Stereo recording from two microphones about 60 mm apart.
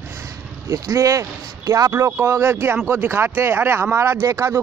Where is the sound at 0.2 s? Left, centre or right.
Right.